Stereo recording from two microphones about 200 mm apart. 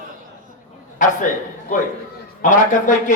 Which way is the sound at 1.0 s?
40° left (ahead or behind).